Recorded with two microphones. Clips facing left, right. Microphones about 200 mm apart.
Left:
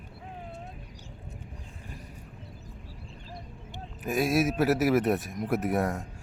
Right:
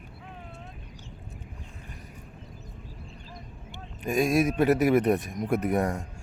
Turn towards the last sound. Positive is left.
turn(degrees=0)  # may be behind; listen again after turning